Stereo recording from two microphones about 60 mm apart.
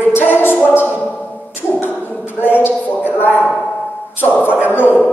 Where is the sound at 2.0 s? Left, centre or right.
Left.